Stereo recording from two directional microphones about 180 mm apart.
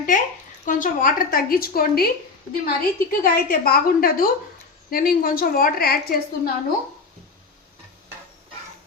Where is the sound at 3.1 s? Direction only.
55° left (ahead or behind).